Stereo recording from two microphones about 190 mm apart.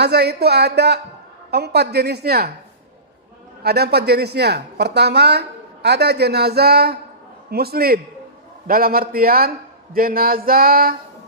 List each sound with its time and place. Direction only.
0.0 s a woman's voice: 60° right (ahead or behind)
3.6 s a woman's voice: 55° right (ahead or behind)
8.6 s a sound: 50° right (ahead or behind)